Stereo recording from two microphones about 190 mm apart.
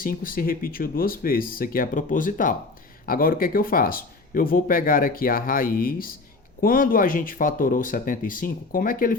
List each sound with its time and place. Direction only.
0.0 s speech: 45° left (ahead or behind)